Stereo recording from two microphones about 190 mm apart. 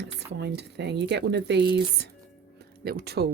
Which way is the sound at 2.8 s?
55° right (ahead or behind).